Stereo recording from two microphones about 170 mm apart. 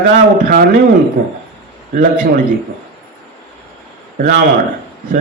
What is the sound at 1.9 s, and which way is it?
Speech, 55° right (ahead or behind).